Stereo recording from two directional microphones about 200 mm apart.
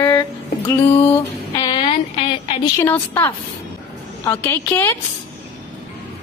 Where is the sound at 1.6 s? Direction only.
25° left (ahead or behind).